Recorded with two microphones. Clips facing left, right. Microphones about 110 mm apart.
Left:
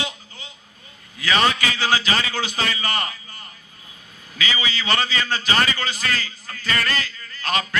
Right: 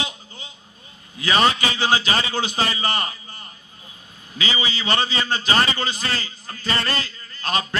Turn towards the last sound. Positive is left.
turn(degrees=-30)  # may be behind; listen again after turning